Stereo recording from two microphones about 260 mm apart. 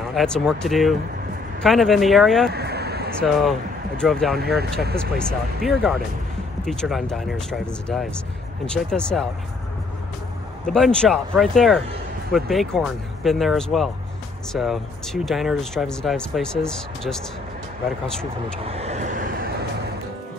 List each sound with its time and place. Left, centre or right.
0.0 s speech: centre
2.5 s vehicle: right
3.2 s speech: centre
10.7 s speech: centre
18.6 s vehicle: right